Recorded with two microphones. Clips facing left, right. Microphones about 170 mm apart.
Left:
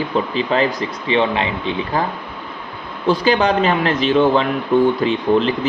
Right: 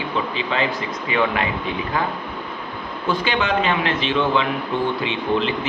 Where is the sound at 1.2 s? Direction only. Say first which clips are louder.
Left 2 dB; 25° left (ahead or behind).